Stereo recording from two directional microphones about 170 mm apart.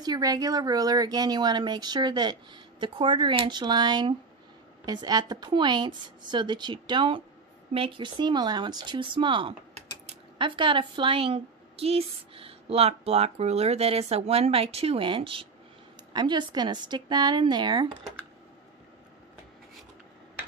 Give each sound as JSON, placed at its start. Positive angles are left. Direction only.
{"t": 0.0, "sound": "a woman's voice", "side_deg": -25}